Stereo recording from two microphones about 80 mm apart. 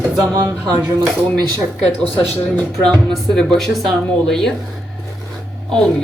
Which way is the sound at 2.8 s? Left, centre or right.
Centre.